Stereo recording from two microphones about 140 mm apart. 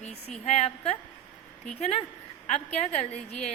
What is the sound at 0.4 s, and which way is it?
A woman's voice, 50° left (ahead or behind).